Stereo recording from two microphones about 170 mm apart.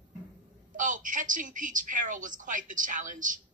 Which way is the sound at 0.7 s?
50° right (ahead or behind).